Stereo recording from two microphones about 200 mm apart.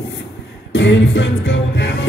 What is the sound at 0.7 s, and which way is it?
Music, 60° left (ahead or behind).